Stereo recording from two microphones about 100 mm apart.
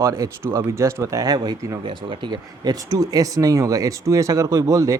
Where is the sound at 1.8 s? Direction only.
55° right (ahead or behind); by 5.0 s 30° right (ahead or behind).